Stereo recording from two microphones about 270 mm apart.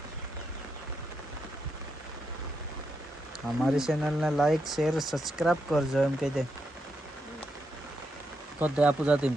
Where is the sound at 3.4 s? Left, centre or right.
Centre.